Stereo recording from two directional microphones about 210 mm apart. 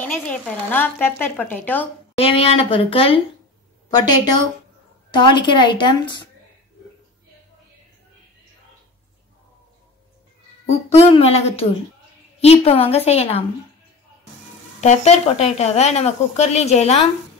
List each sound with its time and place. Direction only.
0.0 s speech: 10° left (ahead or behind)
2.1 s a woman's voice: 25° left (ahead or behind)
10.7 s a woman's voice: 30° left (ahead or behind)
14.8 s speech: 30° left (ahead or behind)